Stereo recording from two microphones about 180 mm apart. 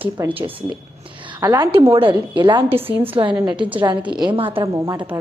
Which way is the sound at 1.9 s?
30° right (ahead or behind).